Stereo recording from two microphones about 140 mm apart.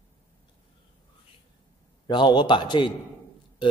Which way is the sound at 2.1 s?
35° left (ahead or behind).